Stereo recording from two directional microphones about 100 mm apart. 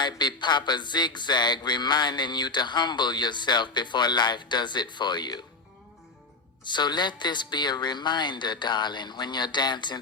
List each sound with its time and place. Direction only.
0.0 s speech: 45° left (ahead or behind)
6.7 s speech: 50° left (ahead or behind)